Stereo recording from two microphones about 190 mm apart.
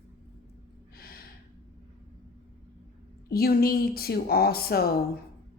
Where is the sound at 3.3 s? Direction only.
55° left (ahead or behind).